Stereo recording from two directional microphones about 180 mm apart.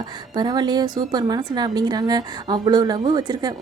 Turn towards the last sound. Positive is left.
turn(degrees=-20)  # may be behind; listen again after turning